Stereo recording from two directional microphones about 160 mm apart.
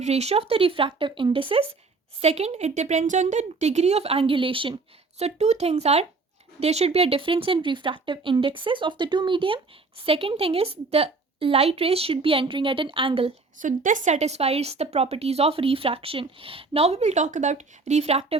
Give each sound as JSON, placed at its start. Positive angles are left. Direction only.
{"t": 0.0, "sound": "a woman's voice", "side_deg": -40}
{"t": 5.2, "sound": "a woman's voice", "side_deg": -45}
{"t": 13.6, "sound": "a woman's voice", "side_deg": -55}